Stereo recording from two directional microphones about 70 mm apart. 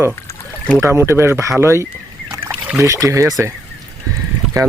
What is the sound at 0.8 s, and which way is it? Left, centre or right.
Speech, right.